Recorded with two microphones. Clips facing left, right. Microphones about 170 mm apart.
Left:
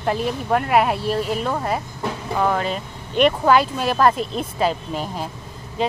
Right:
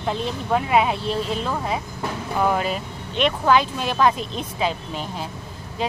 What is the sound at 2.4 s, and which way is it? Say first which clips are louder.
Speech: even; 10° right (ahead or behind).